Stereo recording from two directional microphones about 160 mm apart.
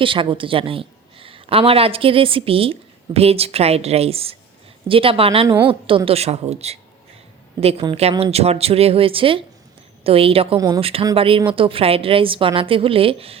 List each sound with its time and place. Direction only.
0.0 s speech: 30° right (ahead or behind)